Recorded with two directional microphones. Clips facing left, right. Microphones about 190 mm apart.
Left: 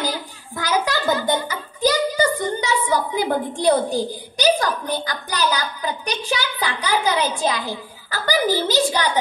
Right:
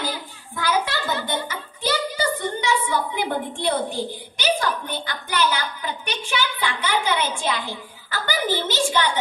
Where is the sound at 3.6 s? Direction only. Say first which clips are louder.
Left 8 dB; 40° left (ahead or behind).